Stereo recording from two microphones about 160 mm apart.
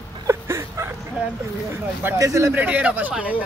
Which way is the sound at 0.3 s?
20° right (ahead or behind).